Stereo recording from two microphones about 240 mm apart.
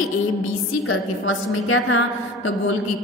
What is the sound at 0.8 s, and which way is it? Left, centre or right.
A woman's voice, left.